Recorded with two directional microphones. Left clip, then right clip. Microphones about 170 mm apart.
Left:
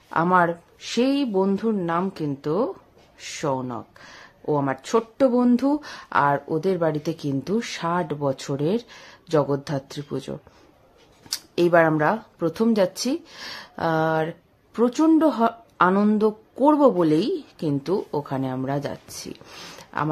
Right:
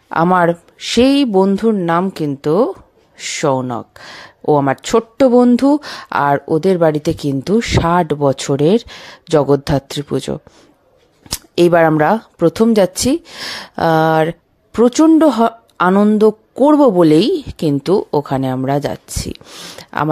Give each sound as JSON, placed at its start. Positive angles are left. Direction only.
{"t": 0.1, "sound": "speech", "side_deg": -55}